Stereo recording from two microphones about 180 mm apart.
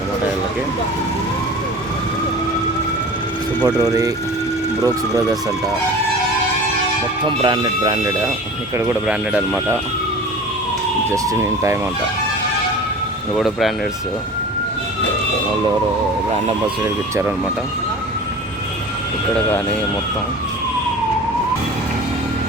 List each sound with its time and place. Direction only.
3.8 s speech: 20° right (ahead or behind)
7.3 s speech: 25° right (ahead or behind)
8.8 s speech: 10° right (ahead or behind)
11.1 s speech: 15° right (ahead or behind)
13.3 s speech: centre (ahead or behind)
16.8 s speech: 15° right (ahead or behind)